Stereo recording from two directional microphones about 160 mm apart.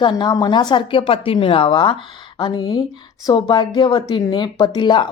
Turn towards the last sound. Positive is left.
turn(degrees=30)  # may be behind; listen again after turning